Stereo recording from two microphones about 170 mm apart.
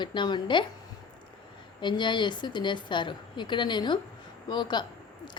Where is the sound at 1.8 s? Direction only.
25° left (ahead or behind).